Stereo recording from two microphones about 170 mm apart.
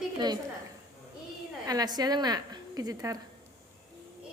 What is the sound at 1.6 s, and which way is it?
A woman's voice, 25° right (ahead or behind).